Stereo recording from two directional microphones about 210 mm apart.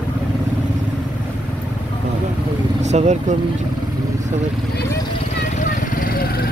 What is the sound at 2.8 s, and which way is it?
Speech, 35° right (ahead or behind).